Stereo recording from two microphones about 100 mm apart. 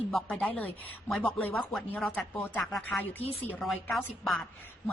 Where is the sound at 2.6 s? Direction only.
5° left (ahead or behind).